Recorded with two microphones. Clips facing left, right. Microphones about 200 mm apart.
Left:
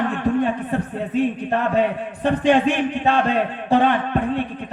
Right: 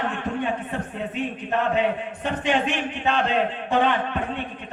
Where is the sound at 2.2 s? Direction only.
35° left (ahead or behind).